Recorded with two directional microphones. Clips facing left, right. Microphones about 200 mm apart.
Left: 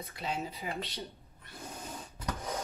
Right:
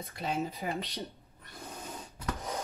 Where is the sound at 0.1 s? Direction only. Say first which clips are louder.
Right 2 dB; 50° right (ahead or behind).